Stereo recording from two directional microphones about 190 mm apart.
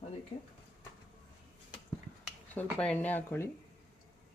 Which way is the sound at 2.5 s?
5° left (ahead or behind).